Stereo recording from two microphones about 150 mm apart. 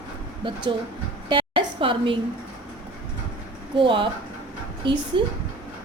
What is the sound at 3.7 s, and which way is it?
A woman's voice, 35° right (ahead or behind).